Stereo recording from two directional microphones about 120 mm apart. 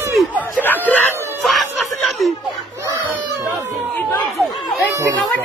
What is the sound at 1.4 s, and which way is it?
Music, centre (ahead or behind).